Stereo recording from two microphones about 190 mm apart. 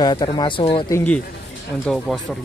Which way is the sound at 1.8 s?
Centre (ahead or behind).